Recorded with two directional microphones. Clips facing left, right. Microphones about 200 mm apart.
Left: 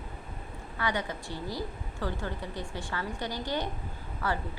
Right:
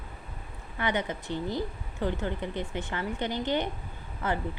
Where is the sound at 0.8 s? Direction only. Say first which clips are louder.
Right 3 dB; 20° right (ahead or behind).